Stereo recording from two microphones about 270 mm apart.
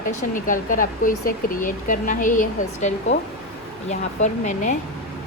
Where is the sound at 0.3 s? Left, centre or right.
Left.